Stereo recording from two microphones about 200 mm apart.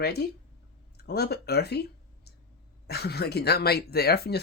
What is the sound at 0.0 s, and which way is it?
Speech, 55° left (ahead or behind).